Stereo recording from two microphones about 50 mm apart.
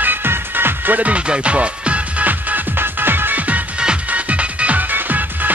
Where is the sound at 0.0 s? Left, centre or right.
Right.